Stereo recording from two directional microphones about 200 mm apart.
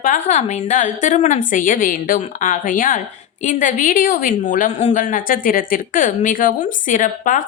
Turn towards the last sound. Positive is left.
turn(degrees=40)  # may be behind; listen again after turning